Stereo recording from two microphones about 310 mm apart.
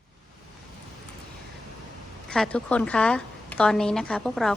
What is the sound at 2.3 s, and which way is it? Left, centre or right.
A woman's voice, centre.